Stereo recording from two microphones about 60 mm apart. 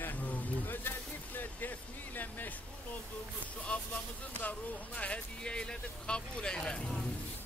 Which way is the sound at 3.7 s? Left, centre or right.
Centre.